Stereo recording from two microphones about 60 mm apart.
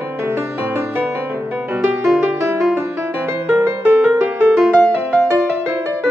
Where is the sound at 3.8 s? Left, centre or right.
Right.